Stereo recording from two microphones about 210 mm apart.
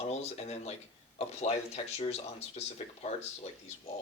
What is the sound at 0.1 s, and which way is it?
Speech, 30° left (ahead or behind).